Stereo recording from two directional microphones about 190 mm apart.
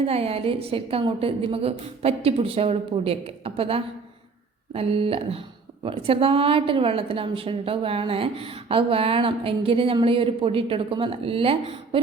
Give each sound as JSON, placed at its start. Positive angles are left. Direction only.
{"t": 0.0, "sound": "a woman's voice", "side_deg": -30}